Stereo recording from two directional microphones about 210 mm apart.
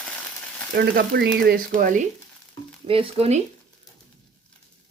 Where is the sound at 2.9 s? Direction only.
25° right (ahead or behind).